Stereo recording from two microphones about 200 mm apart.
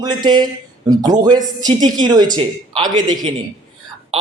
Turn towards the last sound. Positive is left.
turn(degrees=-25)  # may be behind; listen again after turning